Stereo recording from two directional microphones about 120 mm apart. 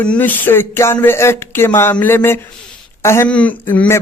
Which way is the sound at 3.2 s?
10° left (ahead or behind).